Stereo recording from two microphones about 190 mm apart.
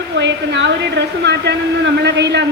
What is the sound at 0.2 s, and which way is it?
A woman's voice, 70° right (ahead or behind).